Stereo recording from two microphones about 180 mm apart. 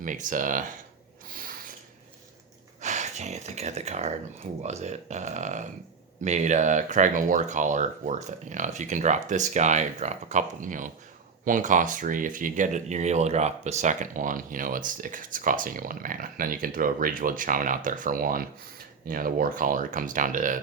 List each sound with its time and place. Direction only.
0.0 s speech: 45° right (ahead or behind)
1.3 s snort: 50° right (ahead or behind)
2.8 s speech: 40° right (ahead or behind)